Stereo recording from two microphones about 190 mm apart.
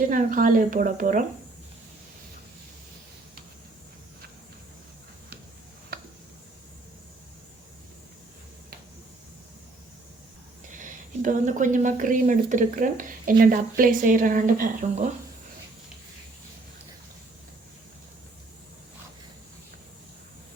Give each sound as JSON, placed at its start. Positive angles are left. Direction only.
{"t": 0.1, "sound": "speech", "side_deg": -45}
{"t": 5.9, "sound": "tick-tock", "side_deg": -55}
{"t": 10.7, "sound": "speech", "side_deg": -40}